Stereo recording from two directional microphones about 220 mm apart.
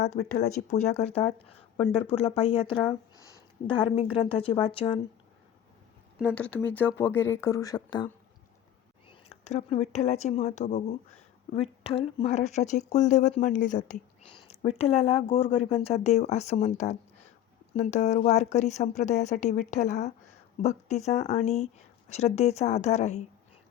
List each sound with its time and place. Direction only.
0.0 s speech: 35° left (ahead or behind)
6.1 s speech: 5° left (ahead or behind)
9.0 s speech: 30° left (ahead or behind)